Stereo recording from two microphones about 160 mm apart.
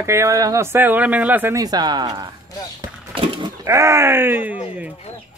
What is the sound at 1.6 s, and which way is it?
Speech, 25° right (ahead or behind).